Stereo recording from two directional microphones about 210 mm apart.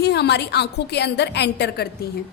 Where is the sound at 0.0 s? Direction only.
55° left (ahead or behind).